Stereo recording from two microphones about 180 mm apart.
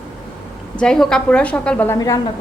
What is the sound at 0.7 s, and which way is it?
A woman's voice, 5° left (ahead or behind).